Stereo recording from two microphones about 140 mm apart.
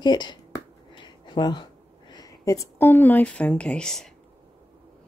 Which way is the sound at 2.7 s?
15° left (ahead or behind).